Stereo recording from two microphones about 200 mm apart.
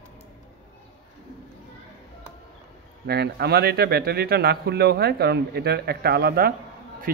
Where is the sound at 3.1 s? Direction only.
55° right (ahead or behind).